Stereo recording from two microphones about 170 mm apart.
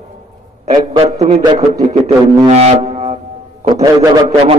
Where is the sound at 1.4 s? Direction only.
25° right (ahead or behind).